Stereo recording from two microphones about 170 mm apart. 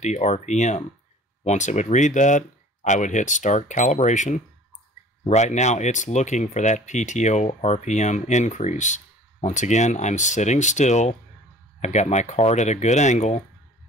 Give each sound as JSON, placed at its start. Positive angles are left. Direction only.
{"t": 0.0, "sound": "speech", "side_deg": 40}